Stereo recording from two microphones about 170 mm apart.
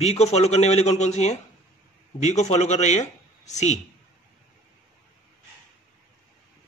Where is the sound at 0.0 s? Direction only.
40° left (ahead or behind).